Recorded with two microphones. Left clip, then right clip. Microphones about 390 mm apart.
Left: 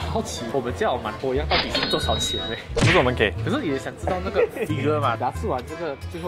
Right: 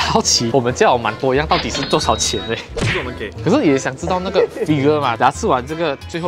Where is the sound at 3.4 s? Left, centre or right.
Right.